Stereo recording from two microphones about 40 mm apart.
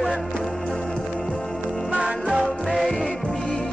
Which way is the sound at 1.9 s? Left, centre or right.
Centre.